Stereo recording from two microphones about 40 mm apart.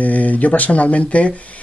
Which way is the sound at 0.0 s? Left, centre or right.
Left.